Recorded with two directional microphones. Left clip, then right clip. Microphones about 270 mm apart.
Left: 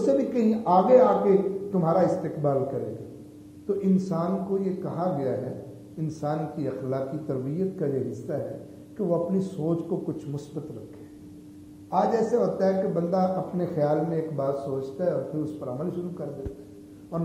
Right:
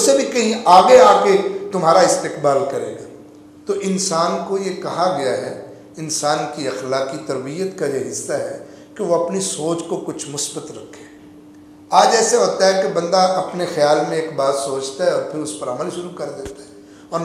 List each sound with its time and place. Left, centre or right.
0.0 s a man's voice: centre
5.4 s a sound: centre
6.0 s a man's voice: centre
10.1 s a man's voice: centre
11.9 s a man's voice: centre
13.3 s speech: centre
13.6 s a man's voice: centre
15.0 s speech: centre